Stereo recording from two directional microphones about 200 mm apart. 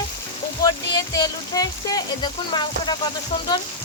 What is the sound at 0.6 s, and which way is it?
Speech, 20° left (ahead or behind).